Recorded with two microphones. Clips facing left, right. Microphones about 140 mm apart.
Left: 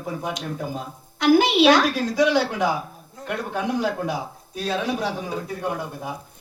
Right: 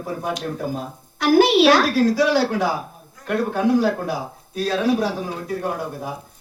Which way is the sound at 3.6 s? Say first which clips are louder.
Right 5 dB; 20° left (ahead or behind).